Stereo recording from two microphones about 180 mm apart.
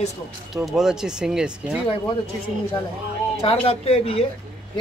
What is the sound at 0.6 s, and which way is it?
Speech, 5° right (ahead or behind).